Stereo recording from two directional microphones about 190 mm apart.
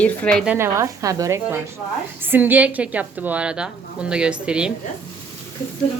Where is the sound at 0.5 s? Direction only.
15° right (ahead or behind).